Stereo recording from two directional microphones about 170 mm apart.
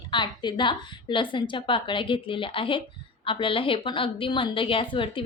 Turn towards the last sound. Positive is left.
turn(degrees=30)  # may be behind; listen again after turning